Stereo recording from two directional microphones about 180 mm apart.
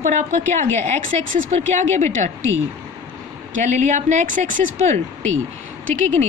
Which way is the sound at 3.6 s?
40° right (ahead or behind).